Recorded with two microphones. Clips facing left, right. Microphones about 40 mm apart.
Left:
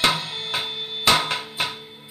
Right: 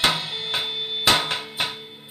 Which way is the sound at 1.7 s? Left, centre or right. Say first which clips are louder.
Even; right.